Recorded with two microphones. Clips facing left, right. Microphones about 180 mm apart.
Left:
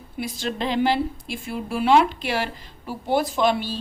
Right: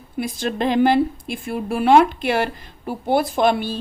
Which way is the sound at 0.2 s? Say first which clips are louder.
Right 5 dB; 50° right (ahead or behind).